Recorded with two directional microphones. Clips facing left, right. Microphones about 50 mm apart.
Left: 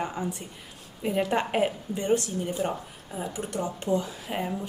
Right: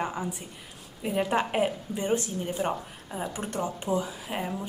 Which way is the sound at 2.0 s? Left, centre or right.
Right.